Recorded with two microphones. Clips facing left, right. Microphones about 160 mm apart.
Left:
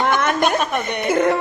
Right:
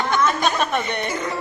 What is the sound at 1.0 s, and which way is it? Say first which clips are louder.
Speech: left 9 dB; 60° left (ahead or behind).